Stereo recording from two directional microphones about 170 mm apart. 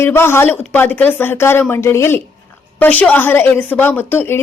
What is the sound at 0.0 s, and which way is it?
A woman's voice, 15° left (ahead or behind).